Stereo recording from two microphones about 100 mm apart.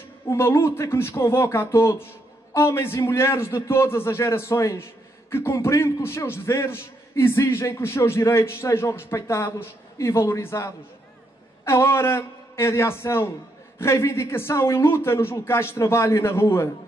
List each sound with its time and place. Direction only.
0.3 s a man's voice: 25° left (ahead or behind)